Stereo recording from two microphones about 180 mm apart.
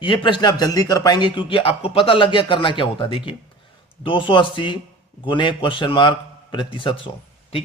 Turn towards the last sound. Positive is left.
turn(degrees=30)  # may be behind; listen again after turning